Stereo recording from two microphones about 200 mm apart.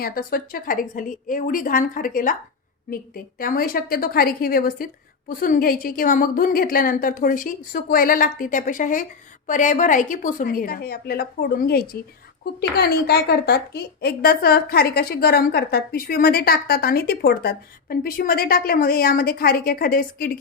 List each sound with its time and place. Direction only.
0.0 s a woman's voice: 45° left (ahead or behind)